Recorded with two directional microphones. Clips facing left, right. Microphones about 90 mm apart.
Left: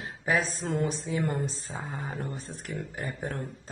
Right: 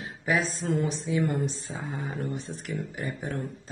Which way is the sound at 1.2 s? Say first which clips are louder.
Right 3 dB; 30° left (ahead or behind).